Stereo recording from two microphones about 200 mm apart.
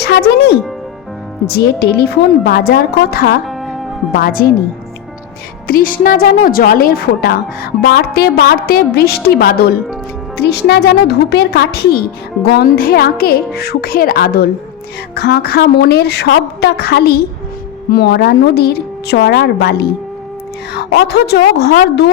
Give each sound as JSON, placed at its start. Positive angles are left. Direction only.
{"t": 0.0, "sound": "a woman's voice", "side_deg": 55}
{"t": 3.4, "sound": "music", "side_deg": 0}
{"t": 4.2, "sound": "a woman's voice", "side_deg": 45}
{"t": 5.6, "sound": "a woman's voice", "side_deg": 45}